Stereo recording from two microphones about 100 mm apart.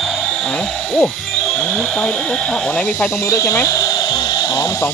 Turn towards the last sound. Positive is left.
turn(degrees=30)  # may be behind; listen again after turning